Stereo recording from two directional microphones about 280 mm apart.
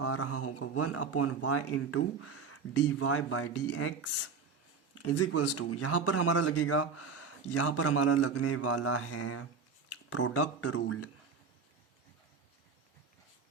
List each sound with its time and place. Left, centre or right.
0.0 s speech: left